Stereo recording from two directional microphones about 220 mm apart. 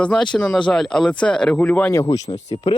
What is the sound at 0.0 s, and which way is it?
Speech, 5° left (ahead or behind).